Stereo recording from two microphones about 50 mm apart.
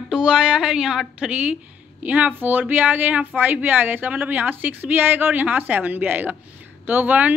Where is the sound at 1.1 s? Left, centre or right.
Right.